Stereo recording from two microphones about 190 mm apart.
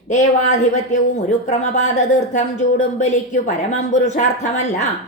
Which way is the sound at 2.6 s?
40° left (ahead or behind).